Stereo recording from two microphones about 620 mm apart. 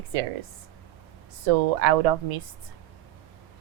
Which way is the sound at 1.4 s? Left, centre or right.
Right.